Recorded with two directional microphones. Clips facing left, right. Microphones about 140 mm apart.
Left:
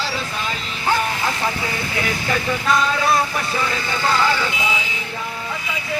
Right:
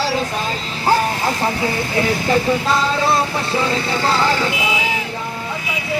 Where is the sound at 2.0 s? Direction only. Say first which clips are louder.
Right 7 dB; 30° right (ahead or behind).